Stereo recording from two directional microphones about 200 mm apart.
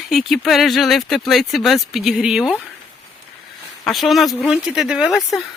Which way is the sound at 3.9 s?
Centre (ahead or behind).